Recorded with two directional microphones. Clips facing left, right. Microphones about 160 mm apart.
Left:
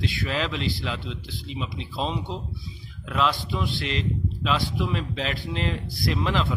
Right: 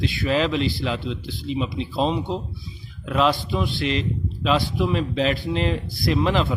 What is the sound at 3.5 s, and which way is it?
A man's voice, 15° right (ahead or behind).